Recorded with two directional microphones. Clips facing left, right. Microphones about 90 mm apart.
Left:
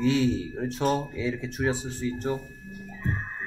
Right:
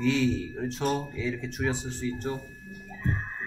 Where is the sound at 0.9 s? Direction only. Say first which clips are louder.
Left 3 dB; 10° left (ahead or behind).